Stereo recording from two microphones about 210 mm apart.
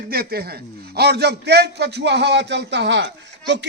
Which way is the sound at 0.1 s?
45° right (ahead or behind).